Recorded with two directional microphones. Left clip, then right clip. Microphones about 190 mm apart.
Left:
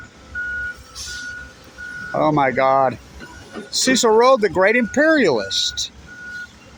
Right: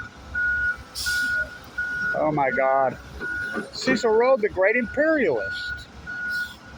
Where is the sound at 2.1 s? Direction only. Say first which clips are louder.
Left 7 dB; 55° left (ahead or behind).